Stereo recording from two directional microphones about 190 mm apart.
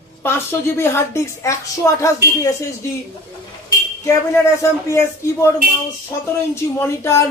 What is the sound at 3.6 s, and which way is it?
Speech, 15° left (ahead or behind).